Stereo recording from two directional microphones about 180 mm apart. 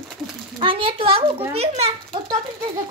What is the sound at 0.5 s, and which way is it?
A child's voice, 30° right (ahead or behind).